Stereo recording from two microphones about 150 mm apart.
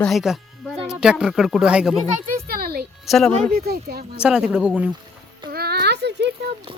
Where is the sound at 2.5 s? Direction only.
90° right.